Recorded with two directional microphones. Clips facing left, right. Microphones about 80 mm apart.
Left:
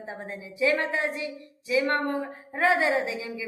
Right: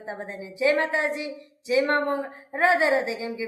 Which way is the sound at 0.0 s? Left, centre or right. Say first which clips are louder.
Right 3 dB; right.